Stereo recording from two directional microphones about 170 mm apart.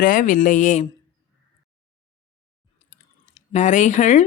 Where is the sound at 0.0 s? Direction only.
55° left (ahead or behind).